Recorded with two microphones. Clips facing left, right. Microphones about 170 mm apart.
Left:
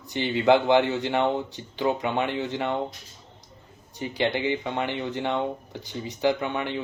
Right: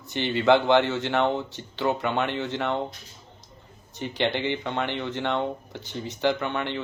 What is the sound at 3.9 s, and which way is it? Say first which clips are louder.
A man's voice: even; 10° left (ahead or behind).